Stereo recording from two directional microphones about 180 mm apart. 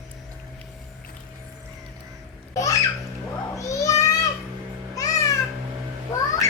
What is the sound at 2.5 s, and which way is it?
Babbling, 20° left (ahead or behind).